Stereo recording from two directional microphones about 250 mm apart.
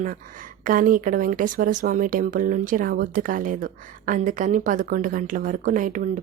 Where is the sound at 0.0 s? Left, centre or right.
Right.